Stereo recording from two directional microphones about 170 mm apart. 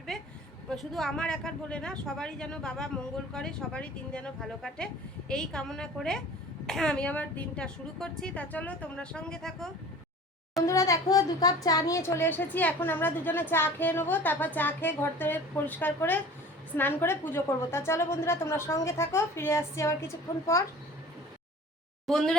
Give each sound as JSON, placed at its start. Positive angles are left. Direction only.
{"t": 0.1, "sound": "a sound", "side_deg": 0}
{"t": 0.7, "sound": "speech", "side_deg": 0}
{"t": 10.7, "sound": "a woman's voice", "side_deg": 20}
{"t": 22.0, "sound": "speech", "side_deg": 0}